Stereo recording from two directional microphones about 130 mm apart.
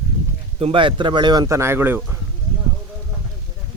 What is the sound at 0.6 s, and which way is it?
Speech, 40° right (ahead or behind).